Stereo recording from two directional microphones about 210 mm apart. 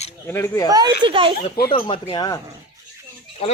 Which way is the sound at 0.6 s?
20° right (ahead or behind).